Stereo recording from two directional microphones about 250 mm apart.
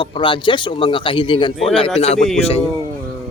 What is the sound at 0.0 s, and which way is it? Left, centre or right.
Speech, centre.